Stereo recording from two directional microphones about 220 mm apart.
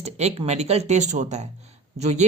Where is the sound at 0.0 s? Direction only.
30° right (ahead or behind).